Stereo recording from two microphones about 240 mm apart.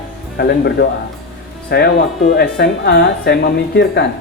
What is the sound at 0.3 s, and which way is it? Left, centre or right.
Speech, left.